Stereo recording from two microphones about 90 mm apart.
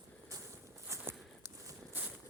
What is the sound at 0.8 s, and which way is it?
Walk, 30° right (ahead or behind).